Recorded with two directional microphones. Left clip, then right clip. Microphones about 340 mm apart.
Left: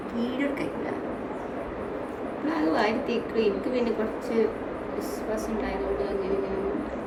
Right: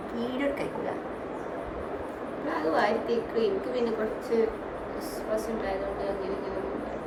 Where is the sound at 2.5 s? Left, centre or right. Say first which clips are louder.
Left 1 dB; centre.